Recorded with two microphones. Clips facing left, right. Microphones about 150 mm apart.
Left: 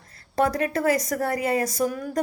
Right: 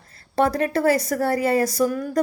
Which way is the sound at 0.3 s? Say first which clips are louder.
Right 3 dB; 30° right (ahead or behind).